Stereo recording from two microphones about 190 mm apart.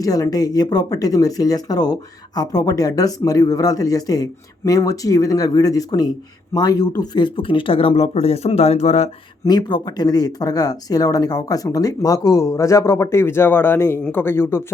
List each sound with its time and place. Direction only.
0.0 s speech: 20° left (ahead or behind); by 9.0 s 35° left (ahead or behind)
9.4 s speech: 20° left (ahead or behind)